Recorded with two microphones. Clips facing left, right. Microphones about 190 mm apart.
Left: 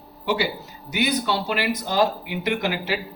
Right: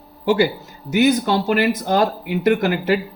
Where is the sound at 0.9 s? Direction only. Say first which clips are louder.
Right 7 dB; 45° right (ahead or behind).